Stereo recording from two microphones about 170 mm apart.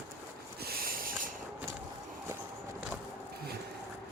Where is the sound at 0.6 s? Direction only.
60° right (ahead or behind).